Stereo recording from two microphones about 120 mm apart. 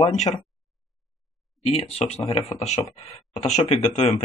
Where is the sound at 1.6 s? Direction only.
55° left (ahead or behind).